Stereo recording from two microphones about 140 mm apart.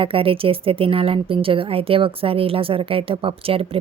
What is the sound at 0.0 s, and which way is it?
A woman's voice, 40° right (ahead or behind).